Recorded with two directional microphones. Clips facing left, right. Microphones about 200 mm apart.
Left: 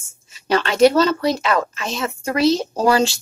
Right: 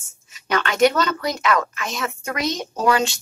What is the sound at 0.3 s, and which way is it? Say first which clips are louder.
A woman's voice: left 4 dB; 30° left (ahead or behind).